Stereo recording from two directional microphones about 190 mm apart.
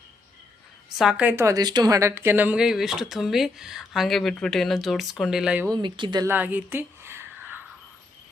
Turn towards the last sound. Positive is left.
turn(degrees=-10)  # may be behind; listen again after turning